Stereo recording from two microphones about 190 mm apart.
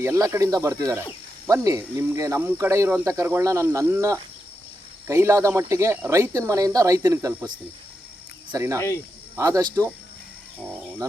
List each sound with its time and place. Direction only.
0.0 s speech: 15° right (ahead or behind)
8.5 s speech: 15° right (ahead or behind)